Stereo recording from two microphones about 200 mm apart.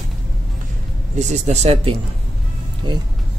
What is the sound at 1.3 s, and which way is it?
Speech, 35° right (ahead or behind).